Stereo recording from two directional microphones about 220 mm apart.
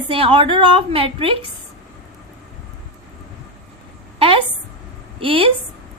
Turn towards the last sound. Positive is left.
turn(degrees=-25)  # may be behind; listen again after turning